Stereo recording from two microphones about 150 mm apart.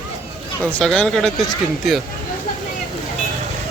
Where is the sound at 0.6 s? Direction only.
5° left (ahead or behind).